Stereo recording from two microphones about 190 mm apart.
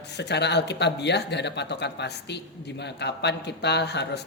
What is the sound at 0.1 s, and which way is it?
Speech, 65° left (ahead or behind).